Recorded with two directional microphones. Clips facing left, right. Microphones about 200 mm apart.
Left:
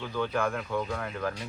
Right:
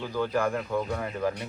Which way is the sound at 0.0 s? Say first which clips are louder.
Right 2 dB; 10° right (ahead or behind).